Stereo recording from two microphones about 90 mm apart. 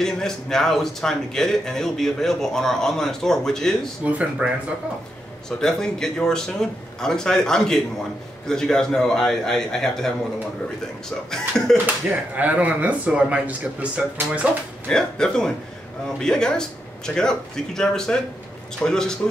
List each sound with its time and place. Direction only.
0.0 s speech: 5° left (ahead or behind)
4.0 s speech: 15° right (ahead or behind)
5.6 s speech: 5° left (ahead or behind)
11.7 s speech: 20° right (ahead or behind)
14.9 s speech: 10° left (ahead or behind)